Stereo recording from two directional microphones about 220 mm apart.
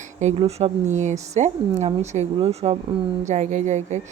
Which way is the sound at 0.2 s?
30° right (ahead or behind).